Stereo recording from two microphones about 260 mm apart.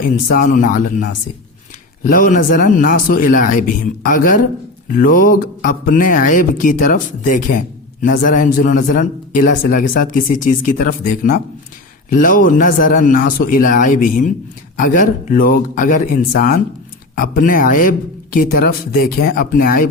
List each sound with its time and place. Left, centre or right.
0.0 s a man's voice: left